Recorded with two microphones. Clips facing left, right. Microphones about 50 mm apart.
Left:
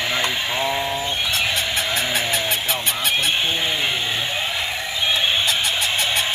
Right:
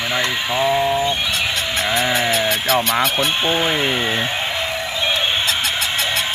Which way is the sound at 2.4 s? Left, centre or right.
Right.